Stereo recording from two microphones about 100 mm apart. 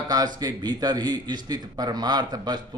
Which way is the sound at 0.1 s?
40° right (ahead or behind).